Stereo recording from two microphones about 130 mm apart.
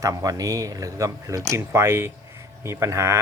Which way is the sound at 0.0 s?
25° right (ahead or behind).